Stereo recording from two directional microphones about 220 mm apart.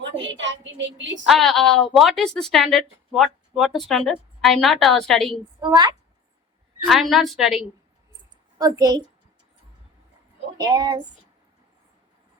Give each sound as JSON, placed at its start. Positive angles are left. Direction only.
{"t": 0.3, "sound": "speech", "side_deg": -55}
{"t": 1.2, "sound": "speech", "side_deg": 0}
{"t": 5.3, "sound": "a woman's voice", "side_deg": -20}
{"t": 6.8, "sound": "speech", "side_deg": 0}
{"t": 8.5, "sound": "a woman's voice", "side_deg": -15}
{"t": 10.6, "sound": "a woman's voice", "side_deg": -15}